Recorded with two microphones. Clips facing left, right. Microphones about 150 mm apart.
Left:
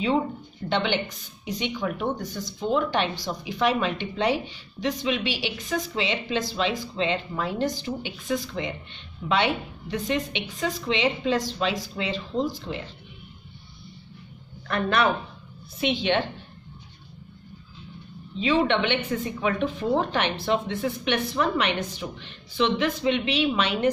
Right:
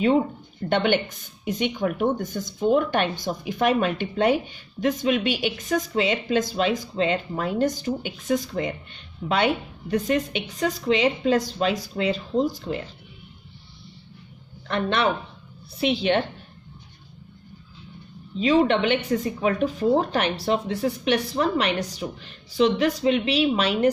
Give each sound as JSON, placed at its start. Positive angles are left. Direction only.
{"t": 0.7, "sound": "speech", "side_deg": -50}
{"t": 14.7, "sound": "speech", "side_deg": -30}
{"t": 18.4, "sound": "speech", "side_deg": -40}